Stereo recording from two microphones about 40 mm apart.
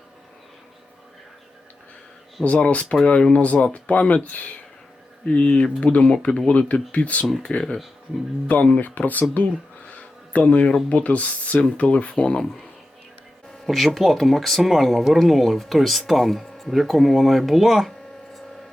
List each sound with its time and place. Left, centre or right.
2.4 s speech: left
3.4 s speech: left
8.7 s speech: left
9.3 s a sound: left
10.8 s speech: left
13.7 s speech: centre